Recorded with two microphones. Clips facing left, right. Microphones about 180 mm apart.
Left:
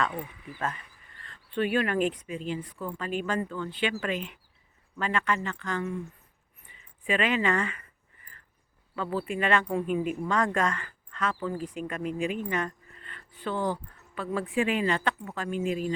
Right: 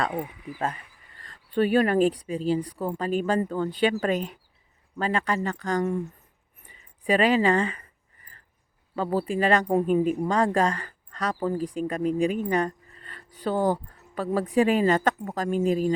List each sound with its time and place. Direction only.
0.6 s speech: 35° right (ahead or behind)
9.0 s speech: 35° right (ahead or behind)